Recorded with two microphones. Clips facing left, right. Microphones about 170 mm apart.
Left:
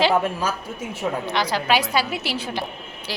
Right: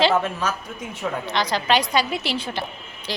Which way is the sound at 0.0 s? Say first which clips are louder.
Even; 10° left (ahead or behind).